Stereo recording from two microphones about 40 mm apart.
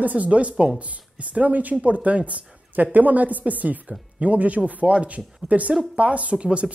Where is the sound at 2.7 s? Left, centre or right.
Right.